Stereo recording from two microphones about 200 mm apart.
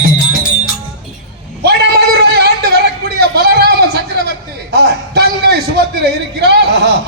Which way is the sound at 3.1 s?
55° right (ahead or behind).